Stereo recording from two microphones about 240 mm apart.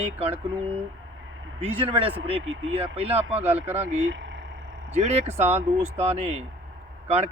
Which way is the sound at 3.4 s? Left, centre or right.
Centre.